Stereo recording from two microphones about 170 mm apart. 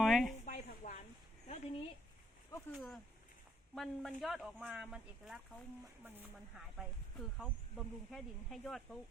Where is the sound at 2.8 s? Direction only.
Centre (ahead or behind).